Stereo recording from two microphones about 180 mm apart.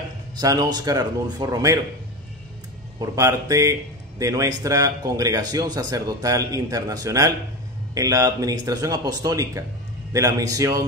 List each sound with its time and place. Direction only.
0.4 s speech: 20° right (ahead or behind)
3.0 s a man's voice: 15° right (ahead or behind)